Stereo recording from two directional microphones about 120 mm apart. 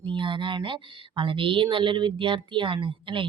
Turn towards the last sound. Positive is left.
turn(degrees=-45)  # may be behind; listen again after turning